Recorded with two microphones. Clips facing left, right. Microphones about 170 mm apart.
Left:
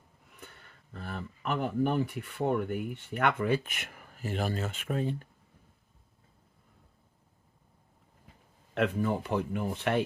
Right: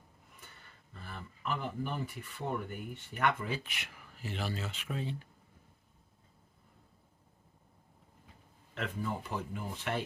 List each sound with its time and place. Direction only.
1.0 s speech: 60° left (ahead or behind)
8.7 s speech: 70° left (ahead or behind)